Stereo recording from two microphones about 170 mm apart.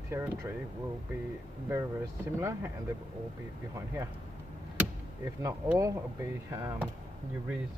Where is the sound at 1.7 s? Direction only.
15° right (ahead or behind).